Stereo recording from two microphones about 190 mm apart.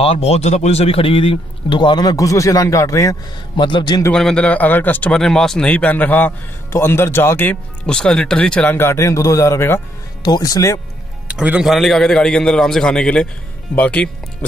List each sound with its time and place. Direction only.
0.0 s a man's voice: 30° left (ahead or behind)
4.1 s a man's voice: 5° left (ahead or behind)
11.2 s a man's voice: 5° right (ahead or behind)